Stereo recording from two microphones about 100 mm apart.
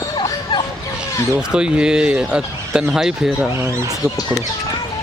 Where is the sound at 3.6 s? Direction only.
25° right (ahead or behind).